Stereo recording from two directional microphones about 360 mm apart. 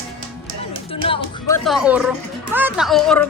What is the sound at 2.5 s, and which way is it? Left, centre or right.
Speech, centre.